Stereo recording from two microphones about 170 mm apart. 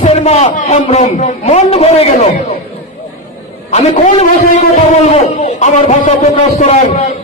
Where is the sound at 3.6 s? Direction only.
45° left (ahead or behind).